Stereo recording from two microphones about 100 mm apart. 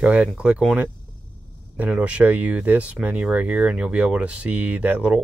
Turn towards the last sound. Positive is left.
turn(degrees=-15)  # may be behind; listen again after turning